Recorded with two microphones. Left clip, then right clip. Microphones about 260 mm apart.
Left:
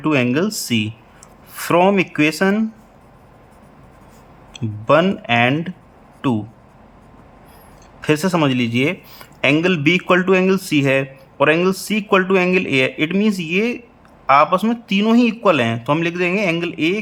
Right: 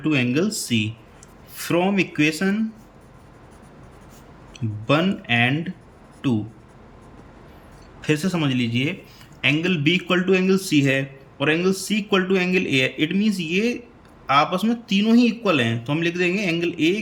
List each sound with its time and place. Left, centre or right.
0.0 s speech: centre
4.5 s speech: centre
8.0 s speech: centre